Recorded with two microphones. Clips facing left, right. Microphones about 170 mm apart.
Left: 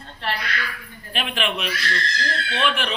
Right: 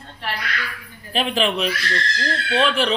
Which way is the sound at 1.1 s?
35° right (ahead or behind).